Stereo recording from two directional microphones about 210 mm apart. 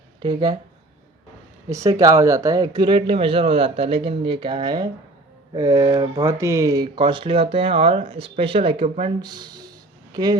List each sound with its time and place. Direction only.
0.2 s speech: 20° right (ahead or behind)
1.7 s speech: 15° right (ahead or behind)